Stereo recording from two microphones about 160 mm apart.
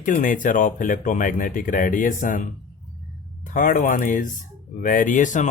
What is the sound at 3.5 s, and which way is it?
Speech, 55° left (ahead or behind).